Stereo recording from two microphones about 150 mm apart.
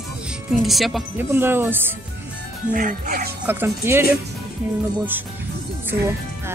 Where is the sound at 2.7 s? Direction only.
65° right (ahead or behind).